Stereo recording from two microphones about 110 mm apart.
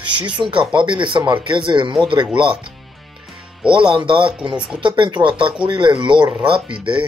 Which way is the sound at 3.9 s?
50° right (ahead or behind).